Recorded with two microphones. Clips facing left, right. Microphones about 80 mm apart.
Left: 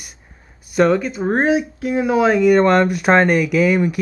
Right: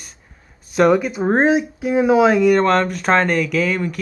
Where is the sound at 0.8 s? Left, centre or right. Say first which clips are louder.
Right 1 dB; centre.